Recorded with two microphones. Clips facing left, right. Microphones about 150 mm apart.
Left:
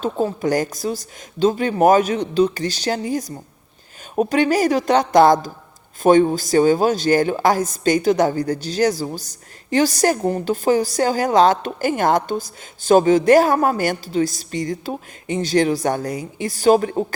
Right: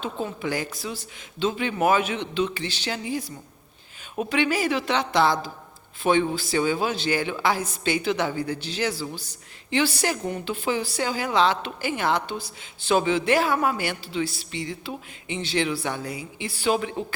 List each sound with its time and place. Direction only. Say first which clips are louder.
0.0 s a woman's voice: left 8 dB; 40° left (ahead or behind)